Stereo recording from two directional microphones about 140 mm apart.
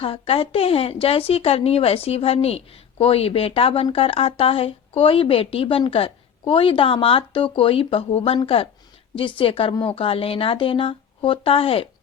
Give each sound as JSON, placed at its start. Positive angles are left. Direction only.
{"t": 0.0, "sound": "a woman's voice", "side_deg": 45}